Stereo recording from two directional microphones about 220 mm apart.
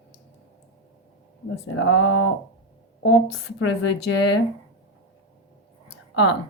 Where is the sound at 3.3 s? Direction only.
65° left (ahead or behind).